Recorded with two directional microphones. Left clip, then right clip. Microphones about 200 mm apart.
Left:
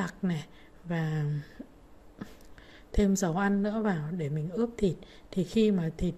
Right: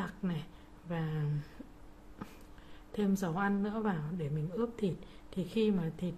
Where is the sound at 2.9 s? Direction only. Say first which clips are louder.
Left 7 dB; 20° left (ahead or behind).